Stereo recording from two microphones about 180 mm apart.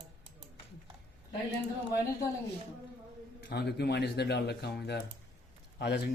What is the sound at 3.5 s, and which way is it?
Speech, 65° left (ahead or behind).